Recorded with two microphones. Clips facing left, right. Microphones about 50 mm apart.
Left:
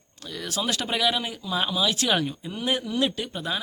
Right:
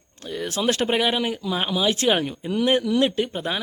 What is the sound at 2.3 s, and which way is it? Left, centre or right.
Speech, right.